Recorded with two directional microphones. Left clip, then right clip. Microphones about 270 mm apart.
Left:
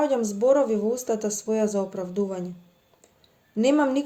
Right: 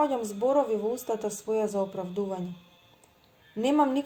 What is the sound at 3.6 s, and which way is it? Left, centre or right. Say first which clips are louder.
Speech: left 3 dB; right.